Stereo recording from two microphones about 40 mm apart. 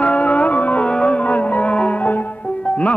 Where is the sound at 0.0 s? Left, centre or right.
Left.